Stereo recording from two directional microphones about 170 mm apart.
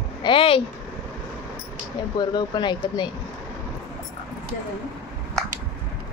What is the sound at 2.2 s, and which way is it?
Speech, 25° left (ahead or behind).